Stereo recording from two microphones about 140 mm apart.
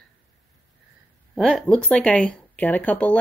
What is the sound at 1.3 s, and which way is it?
Speech, 5° left (ahead or behind).